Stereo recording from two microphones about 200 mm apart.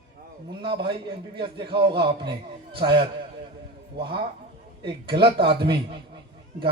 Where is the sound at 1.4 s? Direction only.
25° right (ahead or behind).